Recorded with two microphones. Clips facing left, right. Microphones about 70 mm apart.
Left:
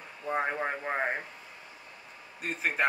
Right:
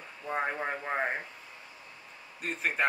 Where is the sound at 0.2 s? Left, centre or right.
Centre.